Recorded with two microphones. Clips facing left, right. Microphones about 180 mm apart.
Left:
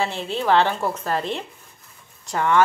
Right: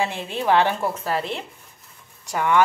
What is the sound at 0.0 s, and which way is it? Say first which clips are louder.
A woman's voice: even; 15° right (ahead or behind).